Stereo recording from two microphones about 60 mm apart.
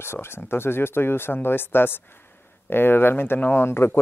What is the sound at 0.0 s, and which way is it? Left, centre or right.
Speech, left.